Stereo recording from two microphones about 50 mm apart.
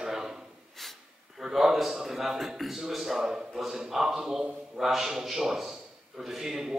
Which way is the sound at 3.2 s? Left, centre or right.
Centre.